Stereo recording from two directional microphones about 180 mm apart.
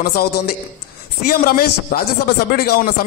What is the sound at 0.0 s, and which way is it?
A man's voice, 60° left (ahead or behind).